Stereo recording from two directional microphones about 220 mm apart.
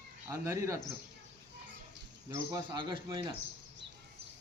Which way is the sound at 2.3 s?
20° right (ahead or behind).